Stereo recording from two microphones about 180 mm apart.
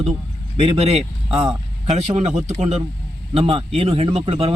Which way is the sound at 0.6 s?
35° right (ahead or behind).